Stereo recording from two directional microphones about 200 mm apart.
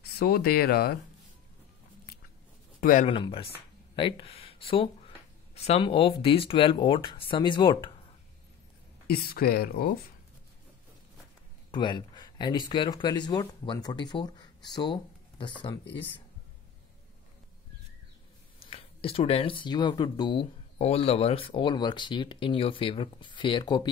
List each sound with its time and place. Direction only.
0.2 s speech: 50° left (ahead or behind)
2.8 s speech: 40° left (ahead or behind)
3.1 s speech: 25° left (ahead or behind)
9.0 s speech: 50° left (ahead or behind)
11.7 s speech: 20° left (ahead or behind)
18.6 s speech: 30° left (ahead or behind)